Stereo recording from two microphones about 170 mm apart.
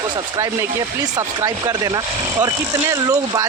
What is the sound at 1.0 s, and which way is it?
Speech, 20° right (ahead or behind).